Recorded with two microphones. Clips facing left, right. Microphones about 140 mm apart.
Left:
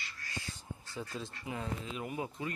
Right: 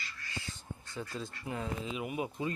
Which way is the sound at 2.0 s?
15° right (ahead or behind).